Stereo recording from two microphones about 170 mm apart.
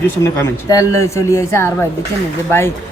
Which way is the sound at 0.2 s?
15° left (ahead or behind).